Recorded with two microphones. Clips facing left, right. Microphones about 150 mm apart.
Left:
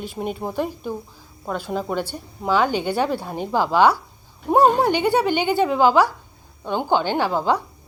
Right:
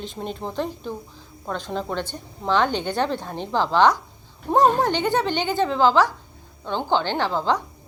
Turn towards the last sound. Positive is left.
turn(degrees=10)  # may be behind; listen again after turning